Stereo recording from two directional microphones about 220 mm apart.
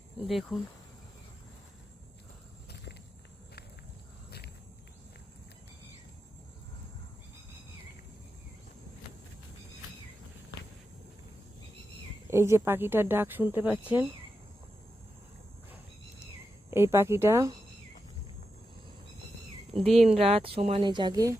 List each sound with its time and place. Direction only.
0.3 s speech: centre (ahead or behind)
12.3 s speech: 10° right (ahead or behind)
16.2 s a sound: 10° right (ahead or behind)
19.7 s speech: centre (ahead or behind)
20.1 s speech: 25° right (ahead or behind)